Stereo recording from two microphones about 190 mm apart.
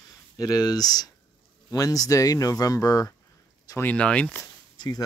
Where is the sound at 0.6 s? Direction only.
20° left (ahead or behind).